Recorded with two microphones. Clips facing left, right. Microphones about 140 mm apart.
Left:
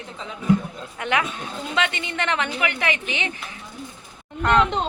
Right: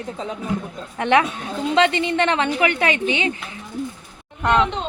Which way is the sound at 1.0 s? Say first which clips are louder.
Right 7 dB; 30° right (ahead or behind).